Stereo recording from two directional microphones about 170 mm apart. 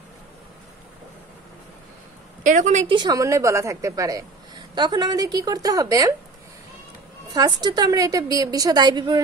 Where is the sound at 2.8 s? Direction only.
25° right (ahead or behind).